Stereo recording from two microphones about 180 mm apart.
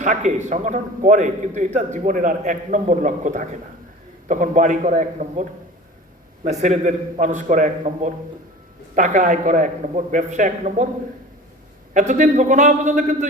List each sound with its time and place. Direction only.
0.0 s a man's voice: 45° right (ahead or behind)
11.9 s a man's voice: 45° right (ahead or behind)